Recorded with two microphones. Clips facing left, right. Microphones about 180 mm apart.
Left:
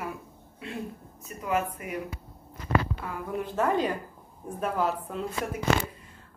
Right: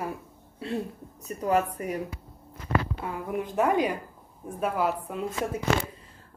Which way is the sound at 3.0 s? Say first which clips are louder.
Right 2 dB; 15° right (ahead or behind).